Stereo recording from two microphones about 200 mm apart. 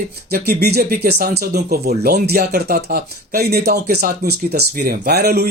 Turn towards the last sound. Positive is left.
turn(degrees=-50)  # may be behind; listen again after turning